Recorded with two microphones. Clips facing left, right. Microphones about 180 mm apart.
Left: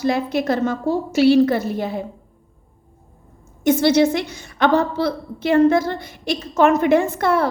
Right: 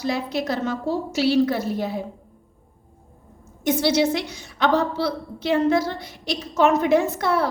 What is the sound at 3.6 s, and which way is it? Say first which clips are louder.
A woman's voice: left 5 dB; 55° left (ahead or behind).